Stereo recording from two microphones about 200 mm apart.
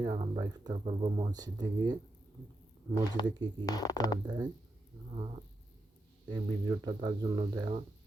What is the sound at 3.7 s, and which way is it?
Speech, 20° left (ahead or behind).